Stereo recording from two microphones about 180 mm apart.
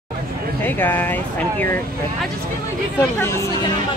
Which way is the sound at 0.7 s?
10° left (ahead or behind).